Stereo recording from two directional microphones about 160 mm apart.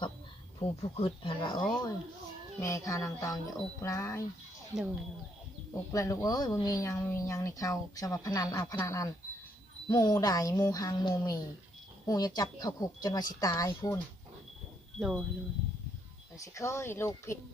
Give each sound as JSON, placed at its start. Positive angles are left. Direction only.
{"t": 0.6, "sound": "speech", "side_deg": 40}
{"t": 5.9, "sound": "speech", "side_deg": 20}
{"t": 14.9, "sound": "speech", "side_deg": 0}
{"t": 16.4, "sound": "speech", "side_deg": 20}